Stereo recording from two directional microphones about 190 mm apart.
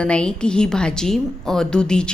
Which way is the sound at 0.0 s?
5° left (ahead or behind).